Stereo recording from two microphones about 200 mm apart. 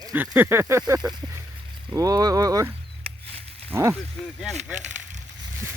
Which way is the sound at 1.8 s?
15° right (ahead or behind).